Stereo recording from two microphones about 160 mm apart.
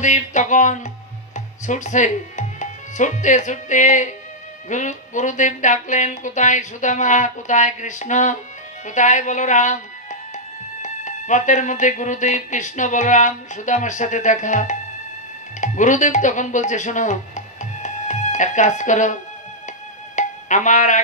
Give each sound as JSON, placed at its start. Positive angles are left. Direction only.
{"t": 0.0, "sound": "music", "side_deg": 50}
{"t": 1.3, "sound": "speech", "side_deg": 50}
{"t": 4.6, "sound": "music", "side_deg": 50}
{"t": 10.3, "sound": "speech", "side_deg": 50}
{"t": 20.2, "sound": "music", "side_deg": 50}